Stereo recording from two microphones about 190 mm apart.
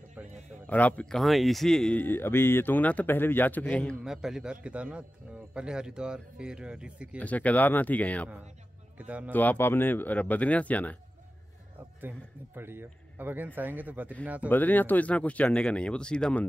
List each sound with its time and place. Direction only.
0.2 s a sound: 5° right (ahead or behind)
0.7 s speech: 10° left (ahead or behind)
4.0 s speech: 5° right (ahead or behind)
7.2 s speech: 10° left (ahead or behind)
8.9 s speech: 10° right (ahead or behind)
9.3 s speech: 10° left (ahead or behind)
12.0 s speech: 10° right (ahead or behind)
14.5 s speech: 10° left (ahead or behind)